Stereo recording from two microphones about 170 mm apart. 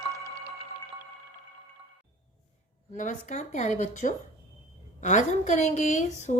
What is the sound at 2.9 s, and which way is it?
A woman's voice, 45° left (ahead or behind).